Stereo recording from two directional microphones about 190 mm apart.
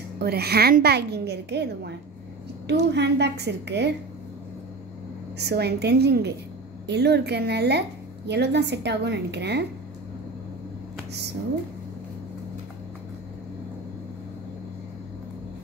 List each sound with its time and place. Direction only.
0.2 s a woman's voice: 55° right (ahead or behind)
5.4 s a woman's voice: 60° right (ahead or behind)